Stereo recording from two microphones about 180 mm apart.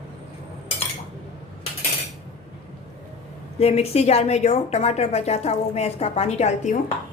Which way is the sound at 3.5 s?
35° left (ahead or behind).